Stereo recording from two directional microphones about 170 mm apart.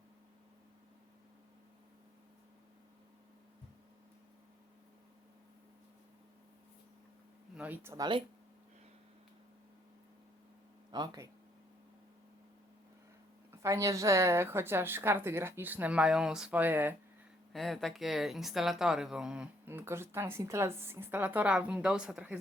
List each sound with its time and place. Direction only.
7.5 s a woman's voice: 10° right (ahead or behind)
10.9 s speech: 25° right (ahead or behind)
13.5 s a woman's voice: 15° right (ahead or behind)
17.5 s speech: centre (ahead or behind)